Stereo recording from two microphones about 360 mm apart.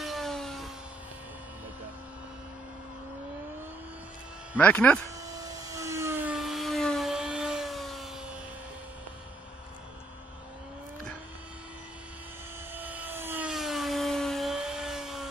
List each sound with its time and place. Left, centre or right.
0.0 s a sound: centre
4.6 s speech: centre
5.3 s helicopter: centre
12.7 s helicopter: centre